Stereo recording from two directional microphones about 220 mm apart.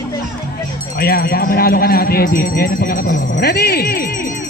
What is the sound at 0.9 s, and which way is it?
Speech, 45° left (ahead or behind).